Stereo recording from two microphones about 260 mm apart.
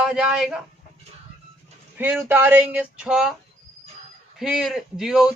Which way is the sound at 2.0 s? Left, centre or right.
Centre.